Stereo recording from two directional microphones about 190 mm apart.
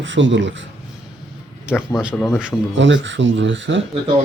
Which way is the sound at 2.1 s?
10° left (ahead or behind).